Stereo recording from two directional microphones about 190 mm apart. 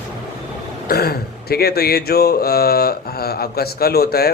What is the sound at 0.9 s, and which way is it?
Speech, 55° left (ahead or behind).